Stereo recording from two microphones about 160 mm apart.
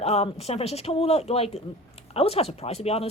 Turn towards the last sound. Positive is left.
turn(degrees=40)  # may be behind; listen again after turning